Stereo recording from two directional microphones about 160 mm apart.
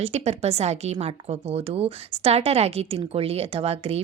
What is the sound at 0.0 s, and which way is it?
Speech, 40° right (ahead or behind).